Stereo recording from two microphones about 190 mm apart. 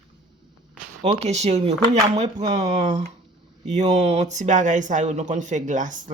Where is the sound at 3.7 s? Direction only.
35° right (ahead or behind).